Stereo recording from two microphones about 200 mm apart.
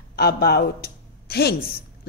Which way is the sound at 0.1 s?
50° left (ahead or behind).